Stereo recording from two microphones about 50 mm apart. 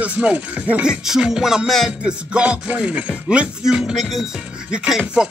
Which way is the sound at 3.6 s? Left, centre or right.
Centre.